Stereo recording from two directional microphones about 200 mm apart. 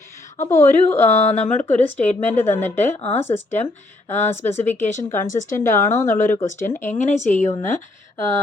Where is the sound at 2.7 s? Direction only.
35° left (ahead or behind).